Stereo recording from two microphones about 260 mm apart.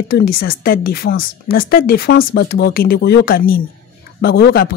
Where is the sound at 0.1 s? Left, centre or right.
Left.